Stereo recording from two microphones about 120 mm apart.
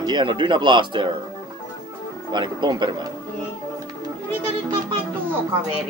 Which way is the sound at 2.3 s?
40° right (ahead or behind).